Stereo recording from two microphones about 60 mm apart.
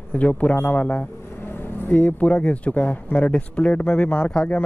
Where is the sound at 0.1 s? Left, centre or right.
Left.